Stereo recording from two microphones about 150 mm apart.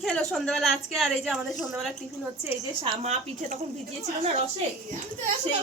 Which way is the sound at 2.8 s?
45° right (ahead or behind).